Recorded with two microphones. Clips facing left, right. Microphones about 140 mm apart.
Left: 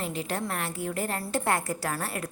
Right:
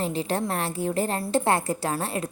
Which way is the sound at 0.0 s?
30° right (ahead or behind).